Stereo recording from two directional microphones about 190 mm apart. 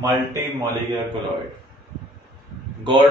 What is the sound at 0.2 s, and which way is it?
Speech, 15° right (ahead or behind).